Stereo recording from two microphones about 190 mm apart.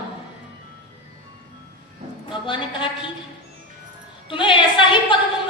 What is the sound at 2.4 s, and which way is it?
Speech, 25° left (ahead or behind).